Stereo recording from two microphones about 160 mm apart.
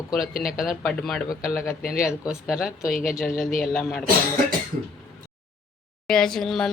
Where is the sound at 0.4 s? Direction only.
Centre (ahead or behind).